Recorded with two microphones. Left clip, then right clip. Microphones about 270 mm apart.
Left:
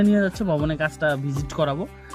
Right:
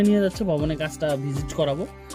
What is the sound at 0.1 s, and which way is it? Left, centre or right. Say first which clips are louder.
Speech: even; left.